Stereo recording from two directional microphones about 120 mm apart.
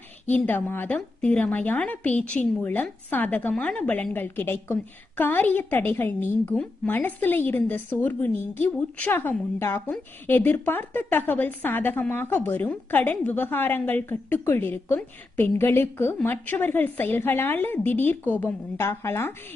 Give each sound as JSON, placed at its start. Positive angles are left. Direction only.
{"t": 0.3, "sound": "a woman's voice", "side_deg": 15}